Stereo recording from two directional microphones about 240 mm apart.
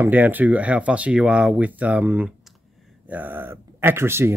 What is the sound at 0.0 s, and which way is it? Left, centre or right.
Speech, centre.